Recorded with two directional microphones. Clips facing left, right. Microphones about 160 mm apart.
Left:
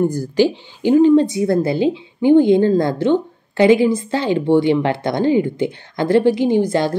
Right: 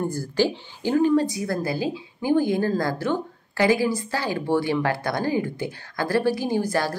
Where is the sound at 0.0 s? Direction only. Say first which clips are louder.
Left 7 dB; 15° left (ahead or behind).